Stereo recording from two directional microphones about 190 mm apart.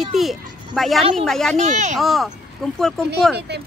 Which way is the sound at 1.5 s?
40° right (ahead or behind).